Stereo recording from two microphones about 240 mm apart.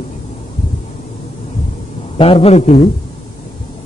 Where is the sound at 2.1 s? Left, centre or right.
Left.